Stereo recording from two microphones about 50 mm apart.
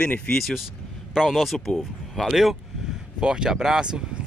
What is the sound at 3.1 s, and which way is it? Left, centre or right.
Speech, centre.